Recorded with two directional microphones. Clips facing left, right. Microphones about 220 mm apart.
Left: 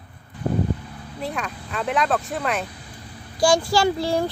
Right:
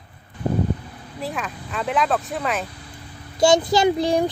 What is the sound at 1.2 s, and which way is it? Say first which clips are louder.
A child's voice: even; centre (ahead or behind).